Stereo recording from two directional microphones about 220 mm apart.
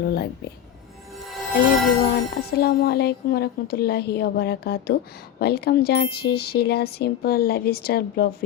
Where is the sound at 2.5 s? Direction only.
45° left (ahead or behind).